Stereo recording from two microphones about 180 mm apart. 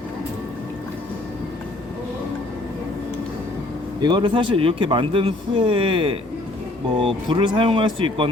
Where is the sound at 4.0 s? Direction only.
25° right (ahead or behind).